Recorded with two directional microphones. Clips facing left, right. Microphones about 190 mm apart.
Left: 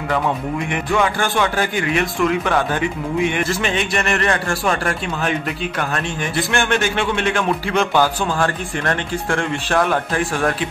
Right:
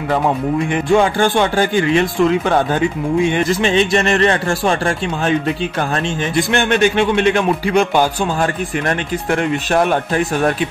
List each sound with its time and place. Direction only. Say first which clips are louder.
0.7 s speech: right 5 dB; 30° right (ahead or behind)